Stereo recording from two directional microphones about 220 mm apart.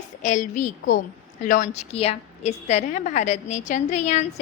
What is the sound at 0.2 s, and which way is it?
A woman's voice, 35° left (ahead or behind).